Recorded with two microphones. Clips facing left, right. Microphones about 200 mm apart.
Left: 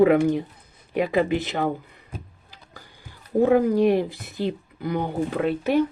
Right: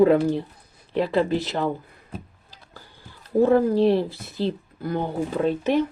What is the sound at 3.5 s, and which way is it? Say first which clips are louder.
Speech: left 1 dB; 15° left (ahead or behind).